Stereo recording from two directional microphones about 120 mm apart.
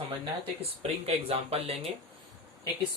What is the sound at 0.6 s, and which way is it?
Speech, 55° right (ahead or behind).